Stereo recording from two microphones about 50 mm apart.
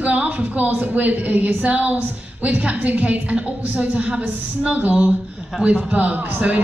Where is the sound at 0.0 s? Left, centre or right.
Right.